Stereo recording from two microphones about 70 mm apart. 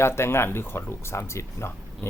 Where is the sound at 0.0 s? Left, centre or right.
Left.